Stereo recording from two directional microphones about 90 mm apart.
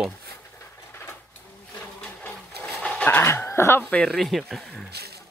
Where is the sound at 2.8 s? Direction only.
10° left (ahead or behind).